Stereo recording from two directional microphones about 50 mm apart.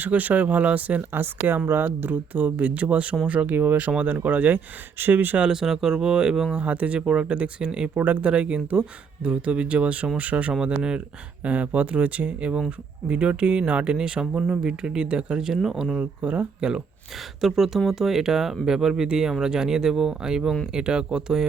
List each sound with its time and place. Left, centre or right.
0.0 s speech: right
1.6 s speech: right
3.5 s speech: right
3.8 s speech: right
5.5 s speech: centre
6.5 s speech: right
7.9 s speech: right
8.3 s speech: right; by 16.0 s centre
16.0 s speech: right
16.6 s speech: centre
17.4 s speech: centre